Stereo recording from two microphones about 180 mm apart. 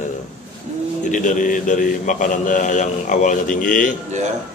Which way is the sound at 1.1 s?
45° left (ahead or behind).